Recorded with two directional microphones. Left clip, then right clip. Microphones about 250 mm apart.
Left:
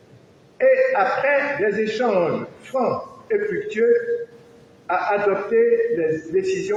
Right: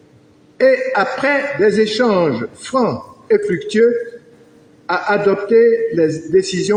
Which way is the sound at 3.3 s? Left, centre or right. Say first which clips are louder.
Right 7 dB; right.